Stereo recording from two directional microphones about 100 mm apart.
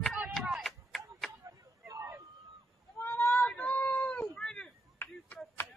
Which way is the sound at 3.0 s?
25° left (ahead or behind).